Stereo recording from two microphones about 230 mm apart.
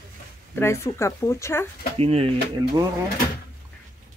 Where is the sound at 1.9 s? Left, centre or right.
Right.